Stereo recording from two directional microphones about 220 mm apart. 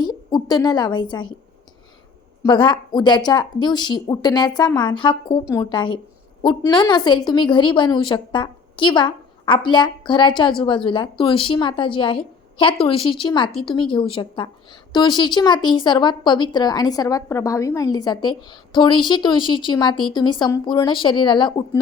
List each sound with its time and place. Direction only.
0.0 s a woman's voice: 20° left (ahead or behind)
2.4 s a woman's voice: 20° left (ahead or behind)